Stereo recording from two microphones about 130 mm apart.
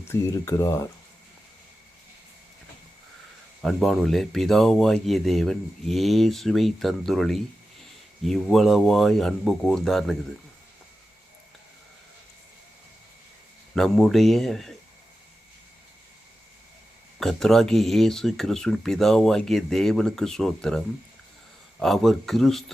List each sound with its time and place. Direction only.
0.0 s speech: 20° left (ahead or behind)
3.6 s speech: centre (ahead or behind)
13.7 s speech: 5° left (ahead or behind)
17.2 s speech: 5° left (ahead or behind)